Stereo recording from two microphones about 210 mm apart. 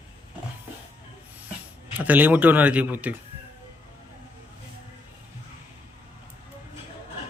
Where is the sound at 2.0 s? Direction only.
10° right (ahead or behind).